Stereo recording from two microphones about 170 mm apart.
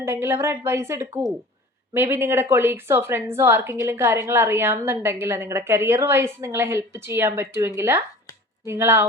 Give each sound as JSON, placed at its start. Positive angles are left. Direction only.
{"t": 0.0, "sound": "speech", "side_deg": -15}